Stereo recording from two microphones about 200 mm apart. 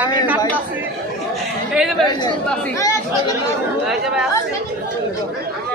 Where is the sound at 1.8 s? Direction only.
Centre (ahead or behind).